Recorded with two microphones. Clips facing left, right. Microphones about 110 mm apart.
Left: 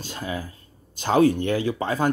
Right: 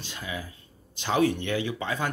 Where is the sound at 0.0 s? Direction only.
40° left (ahead or behind).